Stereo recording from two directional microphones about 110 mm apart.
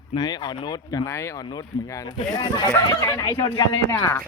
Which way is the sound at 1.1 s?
25° left (ahead or behind).